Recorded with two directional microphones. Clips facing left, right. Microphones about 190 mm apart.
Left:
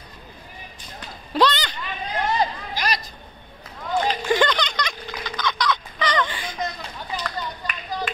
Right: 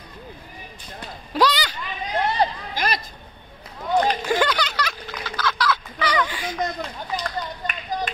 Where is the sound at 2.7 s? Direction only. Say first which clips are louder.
Right 1 dB; 55° right (ahead or behind).